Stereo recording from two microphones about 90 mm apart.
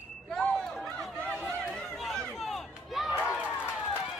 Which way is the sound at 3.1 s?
25° left (ahead or behind).